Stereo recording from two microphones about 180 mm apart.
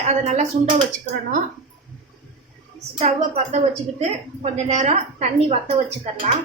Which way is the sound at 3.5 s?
35° right (ahead or behind).